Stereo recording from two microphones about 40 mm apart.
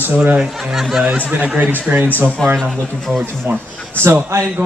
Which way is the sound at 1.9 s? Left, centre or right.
Right.